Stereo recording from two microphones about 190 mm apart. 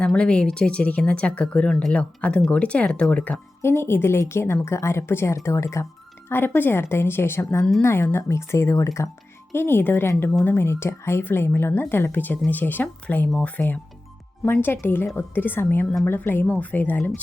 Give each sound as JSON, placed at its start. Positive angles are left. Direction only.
{"t": 0.0, "sound": "speech", "side_deg": 5}